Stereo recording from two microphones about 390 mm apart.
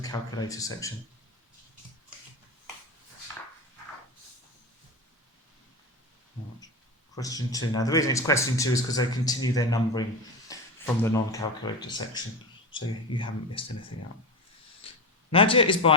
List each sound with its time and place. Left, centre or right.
0.0 s speech: centre
7.2 s speech: centre
13.9 s speech: left
15.3 s speech: centre